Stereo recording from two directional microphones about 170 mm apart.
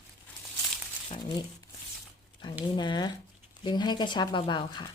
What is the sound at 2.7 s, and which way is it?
Speech, 25° left (ahead or behind).